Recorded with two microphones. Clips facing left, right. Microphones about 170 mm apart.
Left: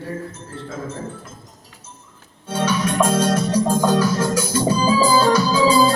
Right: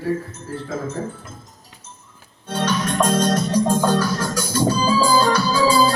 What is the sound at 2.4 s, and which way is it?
Organ, 10° left (ahead or behind).